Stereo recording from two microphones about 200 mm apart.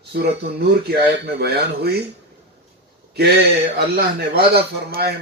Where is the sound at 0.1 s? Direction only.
55° right (ahead or behind).